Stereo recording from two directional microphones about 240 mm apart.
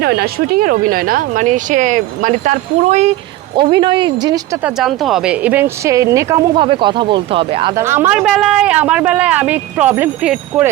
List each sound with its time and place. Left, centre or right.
0.0 s speech: right; by 4.4 s centre
4.6 s speech: centre; by 7.7 s right
7.8 s speech: centre